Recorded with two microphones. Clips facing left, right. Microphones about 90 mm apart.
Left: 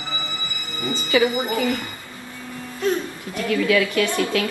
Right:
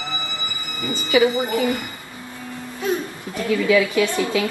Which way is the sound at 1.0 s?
20° right (ahead or behind).